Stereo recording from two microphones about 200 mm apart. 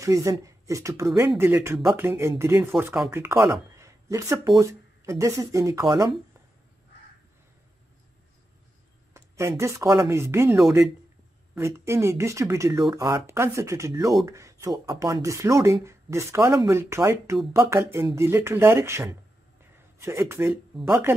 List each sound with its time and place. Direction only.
0.0 s speech: 15° right (ahead or behind)
9.1 s speech: 15° right (ahead or behind)
19.6 s a sound: 15° right (ahead or behind)
20.8 s speech: 10° right (ahead or behind)